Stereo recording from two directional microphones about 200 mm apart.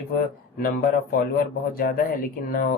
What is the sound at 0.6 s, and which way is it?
Speech, 45° left (ahead or behind).